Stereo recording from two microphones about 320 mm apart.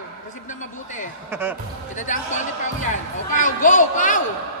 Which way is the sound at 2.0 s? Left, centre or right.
Left.